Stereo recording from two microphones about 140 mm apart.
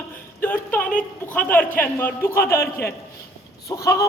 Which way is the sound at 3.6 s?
25° left (ahead or behind).